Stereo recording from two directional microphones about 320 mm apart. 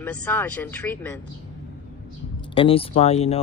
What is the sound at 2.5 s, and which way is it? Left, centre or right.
Speech, centre.